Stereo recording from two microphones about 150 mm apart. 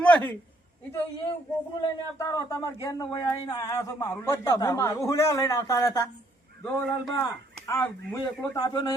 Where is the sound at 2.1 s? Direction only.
20° left (ahead or behind).